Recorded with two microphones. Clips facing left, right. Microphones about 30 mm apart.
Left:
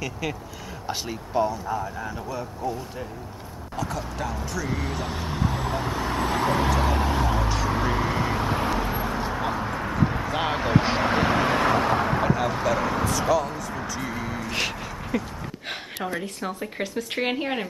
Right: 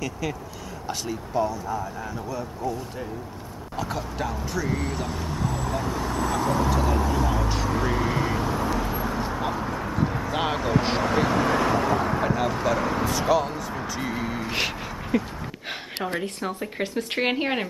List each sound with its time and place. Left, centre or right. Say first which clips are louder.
0.8 s speech: even; centre
3.7 s speech: even; centre
4.6 s speech: right 1 dB; centre
5.0 s speech: left 1 dB; left
6.8 s a sound: even; left
7.6 s vehicle: even; centre
8.5 s vehicle: left 1 dB; left
8.8 s a sound: even; centre
10.5 s speech: left 3 dB; left
11.9 s vehicle: left 1 dB; left
12.4 s speech: even; centre
13.3 s speech: right 2 dB; centre
13.8 s a sound: right 1 dB; centre
16.8 s speech: right 2 dB; centre